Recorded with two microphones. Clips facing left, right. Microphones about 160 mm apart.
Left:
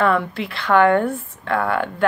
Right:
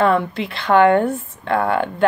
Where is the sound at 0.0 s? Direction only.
25° right (ahead or behind).